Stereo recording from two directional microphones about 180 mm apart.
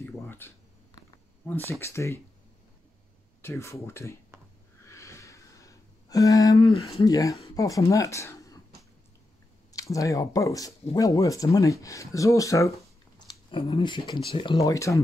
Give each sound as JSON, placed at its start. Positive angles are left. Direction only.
{"t": 0.0, "sound": "speech", "side_deg": 10}
{"t": 1.7, "sound": "speech", "side_deg": 15}
{"t": 3.4, "sound": "speech", "side_deg": 15}
{"t": 4.8, "sound": "a sound", "side_deg": 15}
{"t": 7.0, "sound": "speech", "side_deg": 20}
{"t": 9.7, "sound": "speech", "side_deg": 20}